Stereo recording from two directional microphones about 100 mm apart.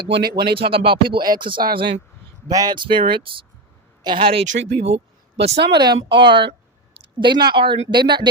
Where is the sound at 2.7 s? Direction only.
55° right (ahead or behind); by 5.5 s 90° right.